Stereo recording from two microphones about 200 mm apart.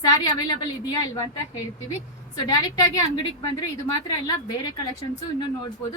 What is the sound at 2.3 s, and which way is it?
Speech, 20° left (ahead or behind).